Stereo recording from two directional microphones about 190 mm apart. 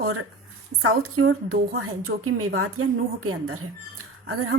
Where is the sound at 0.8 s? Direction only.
90° right.